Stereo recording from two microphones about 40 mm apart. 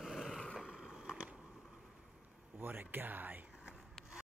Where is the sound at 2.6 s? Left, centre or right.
Right.